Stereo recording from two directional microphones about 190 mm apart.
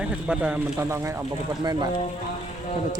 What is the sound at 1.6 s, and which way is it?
Speech, 20° right (ahead or behind).